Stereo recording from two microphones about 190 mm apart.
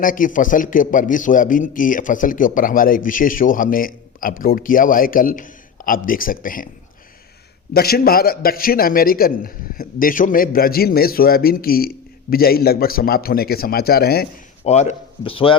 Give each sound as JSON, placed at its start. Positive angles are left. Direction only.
{"t": 0.0, "sound": "a man's voice", "side_deg": 45}
{"t": 7.7, "sound": "a man's voice", "side_deg": 55}
{"t": 14.6, "sound": "speech", "side_deg": 35}